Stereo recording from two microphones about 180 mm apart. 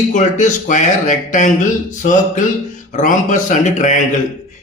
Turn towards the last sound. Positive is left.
turn(degrees=40)  # may be behind; listen again after turning